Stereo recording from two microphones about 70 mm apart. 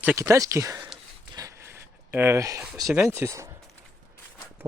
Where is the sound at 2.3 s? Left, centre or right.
Right.